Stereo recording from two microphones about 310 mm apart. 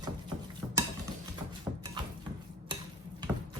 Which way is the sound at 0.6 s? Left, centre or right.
Centre.